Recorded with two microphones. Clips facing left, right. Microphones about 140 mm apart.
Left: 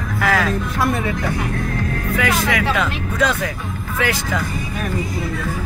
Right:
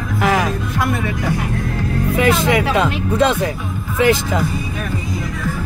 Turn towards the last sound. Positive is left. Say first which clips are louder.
# right 6 dB
turn(degrees=-25)  # may be behind; listen again after turning